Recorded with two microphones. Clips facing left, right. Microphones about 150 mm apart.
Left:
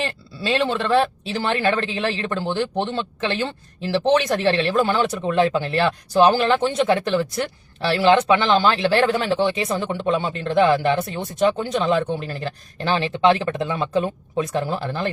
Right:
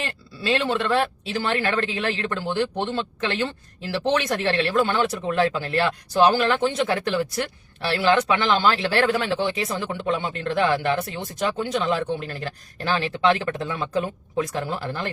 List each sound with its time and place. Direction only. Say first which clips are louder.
0.0 s speech: left 3 dB; 25° left (ahead or behind)